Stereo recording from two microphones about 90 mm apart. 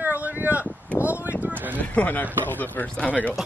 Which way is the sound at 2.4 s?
20° left (ahead or behind).